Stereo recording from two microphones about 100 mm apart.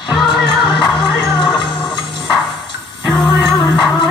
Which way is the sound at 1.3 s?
50° left (ahead or behind).